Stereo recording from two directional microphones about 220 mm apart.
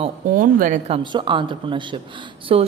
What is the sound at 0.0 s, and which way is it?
A woman's voice, 35° right (ahead or behind).